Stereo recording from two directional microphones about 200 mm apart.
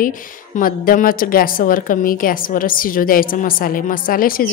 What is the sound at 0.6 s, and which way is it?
A woman's voice, 45° left (ahead or behind).